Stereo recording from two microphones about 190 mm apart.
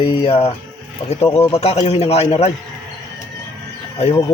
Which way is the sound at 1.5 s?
30° left (ahead or behind).